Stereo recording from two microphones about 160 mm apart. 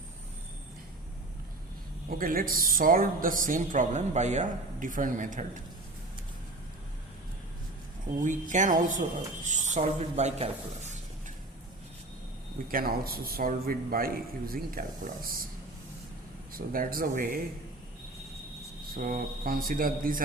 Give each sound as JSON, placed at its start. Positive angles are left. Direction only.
{"t": 2.0, "sound": "speech", "side_deg": -60}
{"t": 8.2, "sound": "speech", "side_deg": -50}
{"t": 12.5, "sound": "speech", "side_deg": -65}
{"t": 16.5, "sound": "speech", "side_deg": -65}
{"t": 18.9, "sound": "speech", "side_deg": -60}